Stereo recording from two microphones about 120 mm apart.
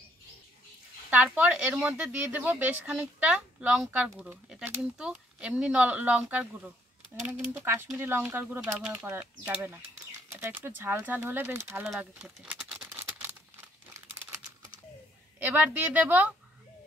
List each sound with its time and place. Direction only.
1.1 s speech: 10° right (ahead or behind)
7.6 s speech: 20° right (ahead or behind)
11.8 s speech: 5° right (ahead or behind)
12.5 s a sound: 5° right (ahead or behind)
12.8 s a sound: 15° right (ahead or behind)
15.3 s speech: 15° right (ahead or behind)